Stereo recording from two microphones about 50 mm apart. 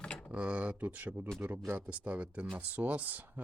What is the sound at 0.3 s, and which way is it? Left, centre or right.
Speech, right.